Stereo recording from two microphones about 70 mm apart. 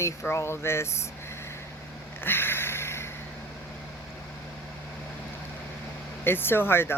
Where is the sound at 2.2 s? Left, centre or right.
Left.